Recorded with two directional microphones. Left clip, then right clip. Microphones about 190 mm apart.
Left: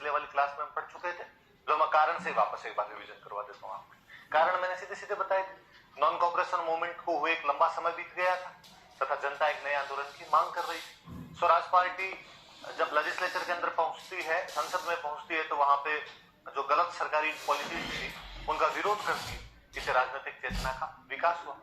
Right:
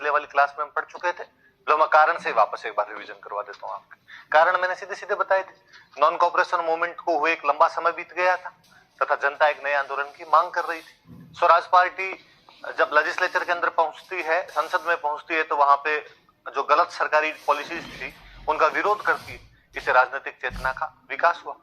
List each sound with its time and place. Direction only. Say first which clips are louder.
0.0 s a man's voice: right 9 dB; 35° right (ahead or behind)